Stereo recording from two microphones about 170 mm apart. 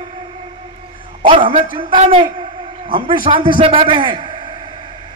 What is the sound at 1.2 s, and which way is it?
A man's voice, 30° right (ahead or behind).